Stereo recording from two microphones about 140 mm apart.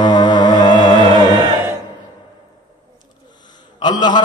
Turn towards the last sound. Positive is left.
turn(degrees=30)  # may be behind; listen again after turning